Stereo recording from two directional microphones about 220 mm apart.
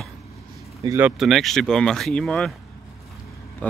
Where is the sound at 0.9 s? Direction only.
10° right (ahead or behind).